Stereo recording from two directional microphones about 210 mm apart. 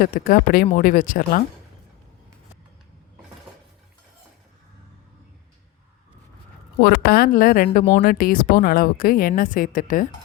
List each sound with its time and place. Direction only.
0.0 s speech: 45° left (ahead or behind)
6.8 s speech: 45° left (ahead or behind)